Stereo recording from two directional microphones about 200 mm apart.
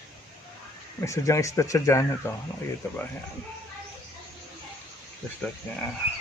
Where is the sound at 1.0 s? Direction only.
15° left (ahead or behind).